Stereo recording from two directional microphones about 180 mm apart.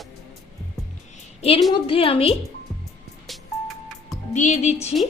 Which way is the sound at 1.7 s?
30° left (ahead or behind).